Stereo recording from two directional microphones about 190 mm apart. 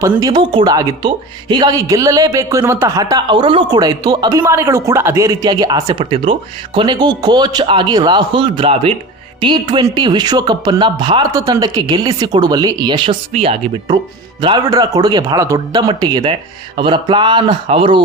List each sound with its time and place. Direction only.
0.0 s speech: 15° right (ahead or behind)